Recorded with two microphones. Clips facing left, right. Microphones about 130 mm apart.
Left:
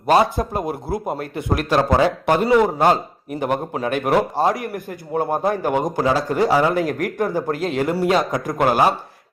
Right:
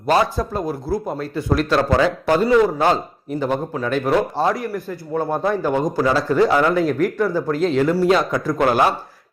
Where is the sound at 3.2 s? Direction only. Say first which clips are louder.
Right 1 dB; 55° left (ahead or behind).